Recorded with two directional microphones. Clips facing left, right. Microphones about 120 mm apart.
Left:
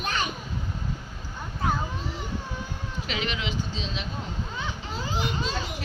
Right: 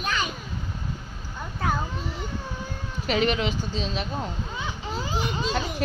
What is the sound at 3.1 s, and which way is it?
Speech, 45° right (ahead or behind).